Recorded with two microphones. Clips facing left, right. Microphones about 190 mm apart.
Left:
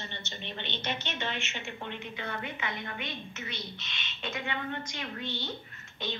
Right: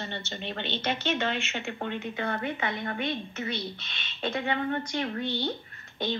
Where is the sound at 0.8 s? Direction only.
90° right.